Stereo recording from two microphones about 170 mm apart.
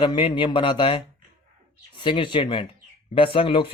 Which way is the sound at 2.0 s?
30° left (ahead or behind).